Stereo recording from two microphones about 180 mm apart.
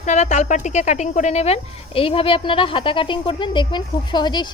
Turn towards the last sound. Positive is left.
turn(degrees=25)  # may be behind; listen again after turning